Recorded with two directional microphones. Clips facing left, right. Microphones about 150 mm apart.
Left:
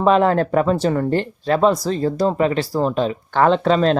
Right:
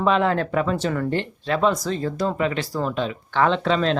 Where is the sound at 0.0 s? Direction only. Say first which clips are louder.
Left 5 dB; 40° left (ahead or behind).